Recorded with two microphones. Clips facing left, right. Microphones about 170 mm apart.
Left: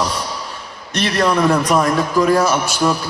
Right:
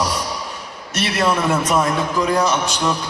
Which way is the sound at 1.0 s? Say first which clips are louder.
Left 3 dB; 40° left (ahead or behind).